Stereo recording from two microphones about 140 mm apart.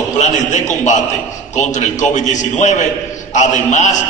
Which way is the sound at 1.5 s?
60° left (ahead or behind).